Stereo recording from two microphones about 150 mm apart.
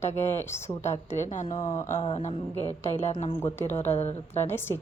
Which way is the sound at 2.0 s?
35° left (ahead or behind).